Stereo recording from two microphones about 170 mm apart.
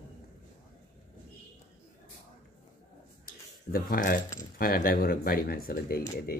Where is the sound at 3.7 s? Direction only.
55° left (ahead or behind).